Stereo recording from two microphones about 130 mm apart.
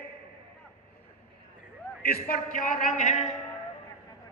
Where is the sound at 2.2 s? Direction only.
90° left; by 3.3 s 60° left (ahead or behind).